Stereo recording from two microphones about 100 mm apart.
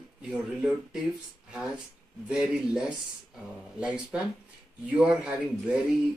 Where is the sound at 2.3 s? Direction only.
5° right (ahead or behind).